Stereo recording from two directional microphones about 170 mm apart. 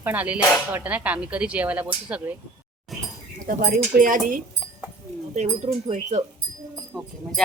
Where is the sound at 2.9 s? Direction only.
Centre (ahead or behind).